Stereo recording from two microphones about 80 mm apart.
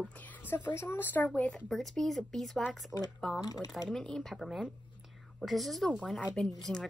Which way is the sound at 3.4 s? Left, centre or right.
Left.